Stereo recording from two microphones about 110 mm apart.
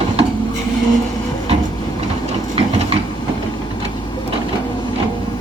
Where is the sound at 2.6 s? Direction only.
65° right (ahead or behind).